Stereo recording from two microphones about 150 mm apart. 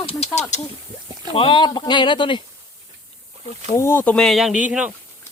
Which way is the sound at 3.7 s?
15° left (ahead or behind).